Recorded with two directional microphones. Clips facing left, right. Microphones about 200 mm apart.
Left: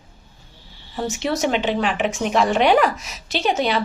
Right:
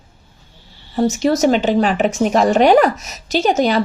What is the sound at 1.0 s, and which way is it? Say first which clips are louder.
A woman's voice: right 8 dB; 40° right (ahead or behind).